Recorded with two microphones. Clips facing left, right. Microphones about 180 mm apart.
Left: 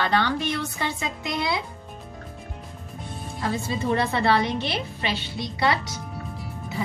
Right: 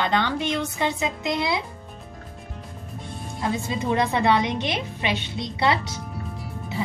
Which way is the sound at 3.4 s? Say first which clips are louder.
Right 1 dB; 20° right (ahead or behind).